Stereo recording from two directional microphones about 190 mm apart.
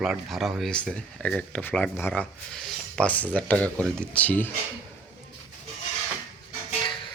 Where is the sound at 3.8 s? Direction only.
10° right (ahead or behind).